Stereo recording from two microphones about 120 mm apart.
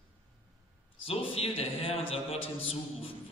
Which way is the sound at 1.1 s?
55° left (ahead or behind).